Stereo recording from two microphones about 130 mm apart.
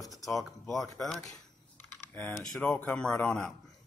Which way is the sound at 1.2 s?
25° left (ahead or behind).